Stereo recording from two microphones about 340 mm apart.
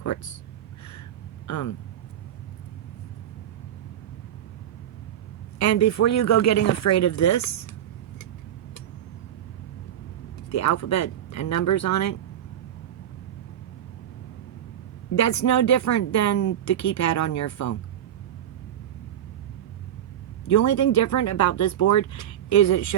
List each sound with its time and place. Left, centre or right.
0.0 s speech: left
1.5 s speech: left
5.5 s a woman's voice: left
10.5 s a woman's voice: left
15.1 s a woman's voice: left
20.5 s speech: left